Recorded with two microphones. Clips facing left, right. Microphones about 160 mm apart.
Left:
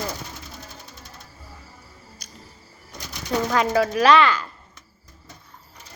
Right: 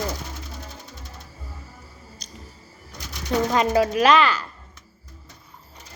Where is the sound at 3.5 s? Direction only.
20° right (ahead or behind).